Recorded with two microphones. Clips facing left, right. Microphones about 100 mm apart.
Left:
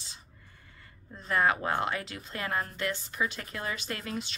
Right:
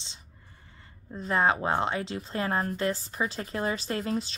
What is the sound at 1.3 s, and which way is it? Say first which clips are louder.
A woman's voice: right 2 dB; 25° right (ahead or behind).